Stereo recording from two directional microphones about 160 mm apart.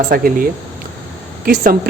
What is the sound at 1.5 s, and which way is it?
Speech, 60° right (ahead or behind).